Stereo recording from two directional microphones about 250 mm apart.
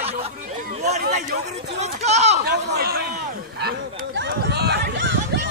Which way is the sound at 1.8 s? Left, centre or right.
Right.